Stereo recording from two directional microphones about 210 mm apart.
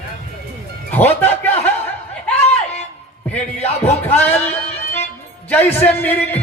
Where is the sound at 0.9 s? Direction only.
10° left (ahead or behind).